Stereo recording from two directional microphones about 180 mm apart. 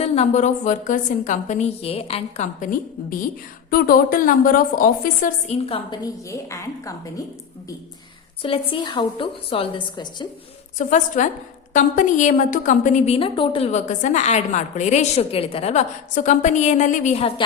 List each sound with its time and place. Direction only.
0.0 s a woman's voice: 40° left (ahead or behind)
5.5 s a woman's voice: 30° left (ahead or behind)
8.4 s a woman's voice: 30° left (ahead or behind)
10.8 s a woman's voice: 45° left (ahead or behind)